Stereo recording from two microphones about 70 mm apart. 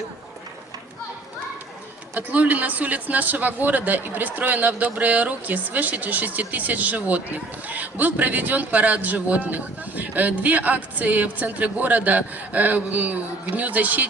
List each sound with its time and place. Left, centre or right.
2.1 s a man's voice: right